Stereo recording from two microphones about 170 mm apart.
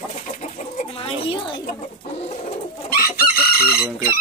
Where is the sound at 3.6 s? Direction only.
65° left (ahead or behind).